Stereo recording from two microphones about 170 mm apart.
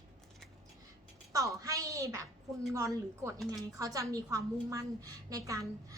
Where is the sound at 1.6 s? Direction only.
20° right (ahead or behind).